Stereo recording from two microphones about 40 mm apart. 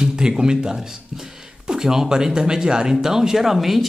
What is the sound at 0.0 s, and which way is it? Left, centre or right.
Speech, centre.